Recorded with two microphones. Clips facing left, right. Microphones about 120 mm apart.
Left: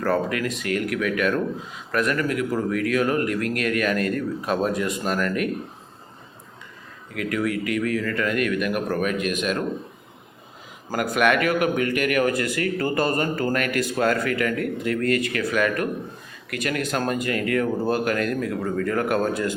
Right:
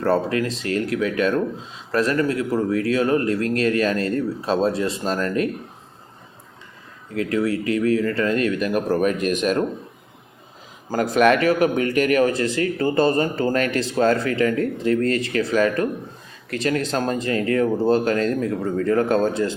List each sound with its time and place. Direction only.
0.0 s speech: 30° right (ahead or behind)
7.1 s speech: 30° right (ahead or behind)
10.9 s speech: 35° right (ahead or behind)